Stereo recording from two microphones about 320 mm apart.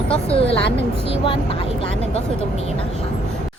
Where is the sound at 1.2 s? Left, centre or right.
Centre.